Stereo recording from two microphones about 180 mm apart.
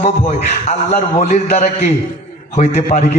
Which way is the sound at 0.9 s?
40° left (ahead or behind).